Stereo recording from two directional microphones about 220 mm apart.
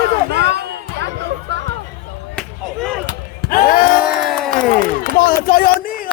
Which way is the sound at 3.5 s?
40° left (ahead or behind).